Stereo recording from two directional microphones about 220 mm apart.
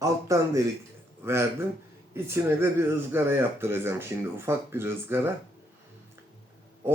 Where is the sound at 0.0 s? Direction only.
15° right (ahead or behind).